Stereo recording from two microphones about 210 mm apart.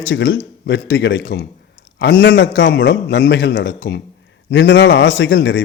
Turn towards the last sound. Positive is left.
turn(degrees=55)  # may be behind; listen again after turning